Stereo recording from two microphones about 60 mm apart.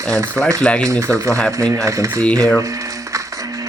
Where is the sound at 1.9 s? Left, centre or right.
Right.